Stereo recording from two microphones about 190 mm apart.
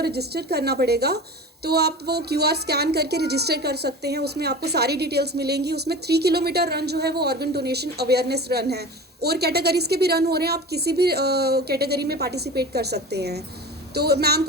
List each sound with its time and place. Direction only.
0.0 s a woman's voice: 55° right (ahead or behind)